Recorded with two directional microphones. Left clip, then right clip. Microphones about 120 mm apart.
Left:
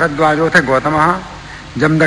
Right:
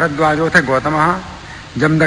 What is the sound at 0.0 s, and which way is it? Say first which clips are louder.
A man's voice: left 2 dB; 35° left (ahead or behind).